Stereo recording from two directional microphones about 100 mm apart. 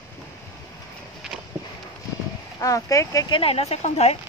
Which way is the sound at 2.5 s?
30° left (ahead or behind).